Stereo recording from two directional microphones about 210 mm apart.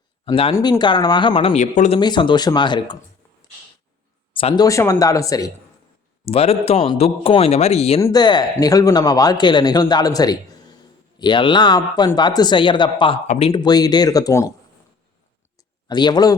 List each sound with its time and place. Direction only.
0.3 s a man's voice: 25° left (ahead or behind)
2.0 s a man's voice: 20° left (ahead or behind)
4.4 s speech: 25° left (ahead or behind)
6.2 s a man's voice: 30° left (ahead or behind)
13.2 s speech: 35° left (ahead or behind)
13.5 s speech: 20° left (ahead or behind)
15.5 s a sound: 20° left (ahead or behind)